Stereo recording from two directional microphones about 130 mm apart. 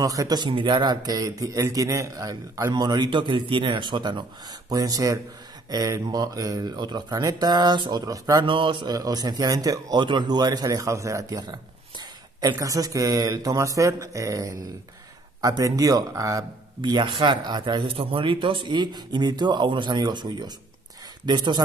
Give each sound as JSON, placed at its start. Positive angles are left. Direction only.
{"t": 0.0, "sound": "a man's voice", "side_deg": -25}
{"t": 0.5, "sound": "a man's voice", "side_deg": -40}
{"t": 8.5, "sound": "a man's voice", "side_deg": -40}